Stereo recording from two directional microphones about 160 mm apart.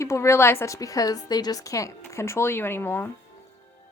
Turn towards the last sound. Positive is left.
turn(degrees=15)  # may be behind; listen again after turning